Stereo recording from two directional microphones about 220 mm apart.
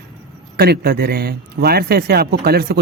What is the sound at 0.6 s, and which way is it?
Speech, 45° right (ahead or behind).